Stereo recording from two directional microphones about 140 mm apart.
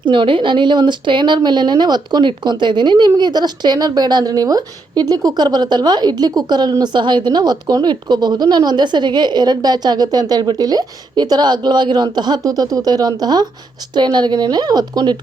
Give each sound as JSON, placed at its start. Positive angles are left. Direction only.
{"t": 0.1, "sound": "speech", "side_deg": -35}